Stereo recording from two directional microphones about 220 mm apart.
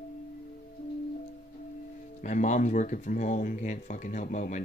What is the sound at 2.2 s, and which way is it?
Speech, 35° left (ahead or behind).